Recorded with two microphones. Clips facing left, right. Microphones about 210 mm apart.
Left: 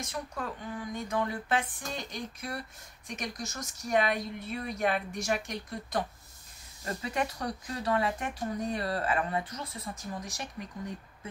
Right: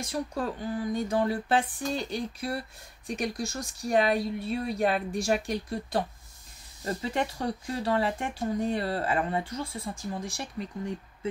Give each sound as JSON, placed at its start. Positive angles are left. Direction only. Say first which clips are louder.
{"t": 0.0, "sound": "speech", "louder": "right 6 dB", "side_deg": -35}